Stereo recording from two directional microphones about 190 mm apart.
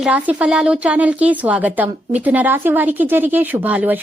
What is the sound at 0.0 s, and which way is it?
A woman's voice, 5° right (ahead or behind).